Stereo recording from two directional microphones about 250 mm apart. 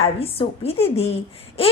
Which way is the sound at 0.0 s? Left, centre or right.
Left.